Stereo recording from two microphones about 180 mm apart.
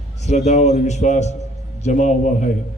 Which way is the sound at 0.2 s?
40° left (ahead or behind).